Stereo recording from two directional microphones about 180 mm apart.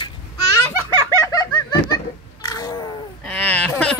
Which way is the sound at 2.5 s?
20° left (ahead or behind).